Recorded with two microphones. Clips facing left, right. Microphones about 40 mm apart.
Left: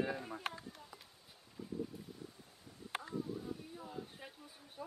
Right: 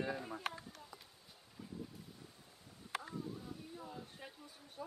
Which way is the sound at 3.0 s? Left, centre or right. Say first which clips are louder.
Left 4 dB; centre.